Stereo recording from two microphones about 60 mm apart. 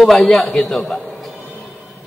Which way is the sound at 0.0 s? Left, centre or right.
Centre.